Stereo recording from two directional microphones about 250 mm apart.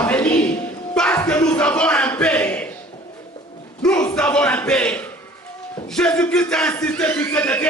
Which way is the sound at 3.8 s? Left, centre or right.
Centre.